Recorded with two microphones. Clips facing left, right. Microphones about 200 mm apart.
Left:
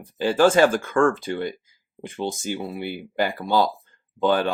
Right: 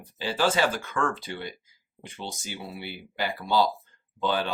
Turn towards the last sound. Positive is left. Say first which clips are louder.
# left 7 dB
turn(degrees=50)  # may be behind; listen again after turning